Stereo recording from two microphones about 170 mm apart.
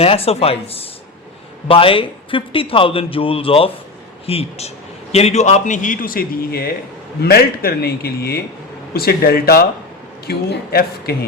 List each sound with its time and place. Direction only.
0.0 s a man's voice: 35° left (ahead or behind); by 11.3 s 65° left (ahead or behind)